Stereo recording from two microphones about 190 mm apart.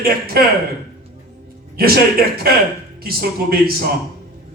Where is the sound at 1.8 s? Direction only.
50° right (ahead or behind).